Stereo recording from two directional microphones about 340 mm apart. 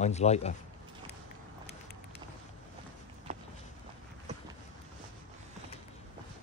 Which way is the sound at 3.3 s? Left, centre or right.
Centre.